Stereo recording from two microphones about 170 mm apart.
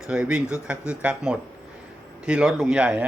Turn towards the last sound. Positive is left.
turn(degrees=-5)  # may be behind; listen again after turning